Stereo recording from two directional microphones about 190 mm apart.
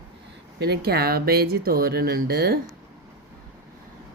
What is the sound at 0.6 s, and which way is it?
Speech, 55° right (ahead or behind).